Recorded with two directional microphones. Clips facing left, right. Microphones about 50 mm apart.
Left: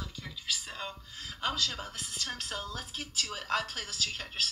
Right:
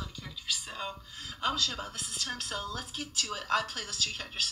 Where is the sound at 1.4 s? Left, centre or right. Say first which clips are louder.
Right 2 dB; centre.